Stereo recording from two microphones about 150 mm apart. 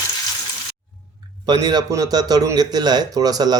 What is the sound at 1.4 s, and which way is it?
Speech, 30° right (ahead or behind).